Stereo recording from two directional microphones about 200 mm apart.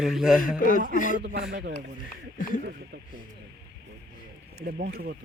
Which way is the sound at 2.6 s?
50° right (ahead or behind).